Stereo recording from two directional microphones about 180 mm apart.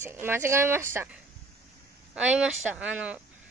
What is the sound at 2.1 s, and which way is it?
Speech, 5° right (ahead or behind).